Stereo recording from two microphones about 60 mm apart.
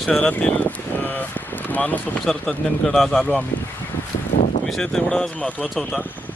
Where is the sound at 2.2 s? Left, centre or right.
Centre.